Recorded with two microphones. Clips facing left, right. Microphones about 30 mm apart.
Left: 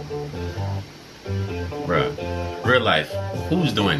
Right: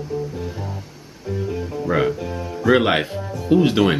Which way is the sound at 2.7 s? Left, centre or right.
Centre.